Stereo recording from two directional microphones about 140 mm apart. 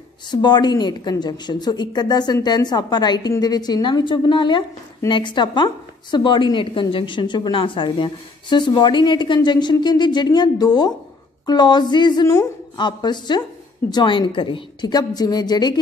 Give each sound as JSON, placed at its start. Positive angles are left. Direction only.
{"t": 0.3, "sound": "a woman's voice", "side_deg": 30}